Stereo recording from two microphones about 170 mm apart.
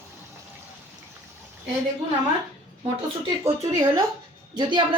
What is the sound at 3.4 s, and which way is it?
A woman's voice, 20° right (ahead or behind).